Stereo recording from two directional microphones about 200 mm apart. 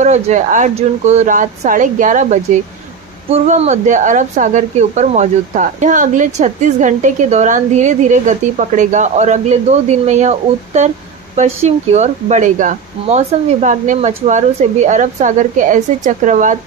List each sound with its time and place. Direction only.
0.0 s a woman's voice: 35° right (ahead or behind)